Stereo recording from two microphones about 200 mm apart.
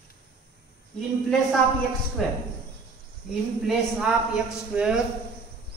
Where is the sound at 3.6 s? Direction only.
5° right (ahead or behind).